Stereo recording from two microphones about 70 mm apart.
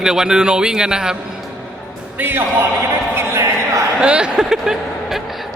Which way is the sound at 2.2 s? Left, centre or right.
Right.